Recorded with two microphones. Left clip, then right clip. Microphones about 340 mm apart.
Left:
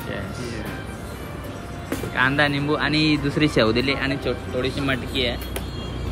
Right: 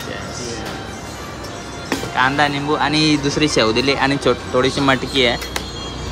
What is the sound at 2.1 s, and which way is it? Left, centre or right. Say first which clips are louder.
Speech: right 4 dB; centre.